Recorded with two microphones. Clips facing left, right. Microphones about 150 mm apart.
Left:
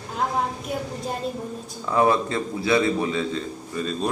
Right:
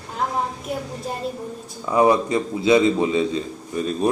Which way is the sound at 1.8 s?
15° right (ahead or behind).